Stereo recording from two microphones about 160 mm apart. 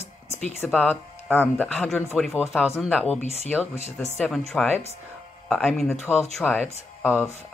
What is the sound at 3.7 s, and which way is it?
Speech, 45° left (ahead or behind).